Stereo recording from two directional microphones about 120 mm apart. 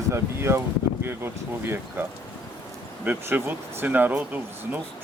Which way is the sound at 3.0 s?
15° right (ahead or behind).